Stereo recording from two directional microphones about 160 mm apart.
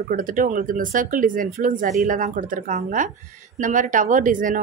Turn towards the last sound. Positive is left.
turn(degrees=-55)  # may be behind; listen again after turning